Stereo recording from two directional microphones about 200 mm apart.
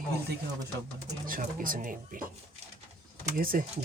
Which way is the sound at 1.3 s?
45° right (ahead or behind).